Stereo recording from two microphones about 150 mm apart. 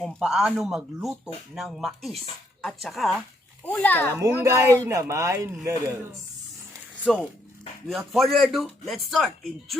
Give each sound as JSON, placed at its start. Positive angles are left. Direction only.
{"t": 0.0, "sound": "a child's voice", "side_deg": 0}
{"t": 4.4, "sound": "speech", "side_deg": -15}
{"t": 7.1, "sound": "speech", "side_deg": 0}